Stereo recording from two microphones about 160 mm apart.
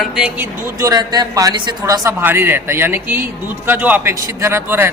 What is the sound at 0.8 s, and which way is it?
A man's voice, 20° right (ahead or behind).